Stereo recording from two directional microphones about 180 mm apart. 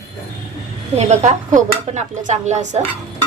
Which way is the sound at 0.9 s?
40° right (ahead or behind).